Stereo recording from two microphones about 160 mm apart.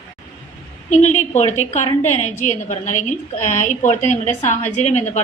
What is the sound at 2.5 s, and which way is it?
A woman's voice, 50° left (ahead or behind).